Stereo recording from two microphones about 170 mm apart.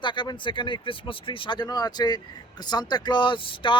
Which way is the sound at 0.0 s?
25° left (ahead or behind).